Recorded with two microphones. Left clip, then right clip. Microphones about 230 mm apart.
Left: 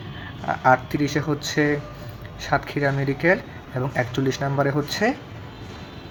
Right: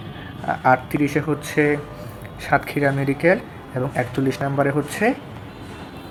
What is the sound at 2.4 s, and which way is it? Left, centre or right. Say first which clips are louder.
Speech: right 3 dB; centre.